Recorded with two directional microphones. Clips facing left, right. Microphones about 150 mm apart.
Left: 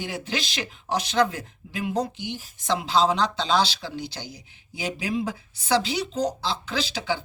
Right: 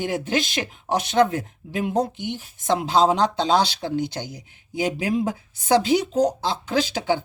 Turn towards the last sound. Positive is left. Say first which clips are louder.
# right 6 dB
turn(degrees=-50)  # may be behind; listen again after turning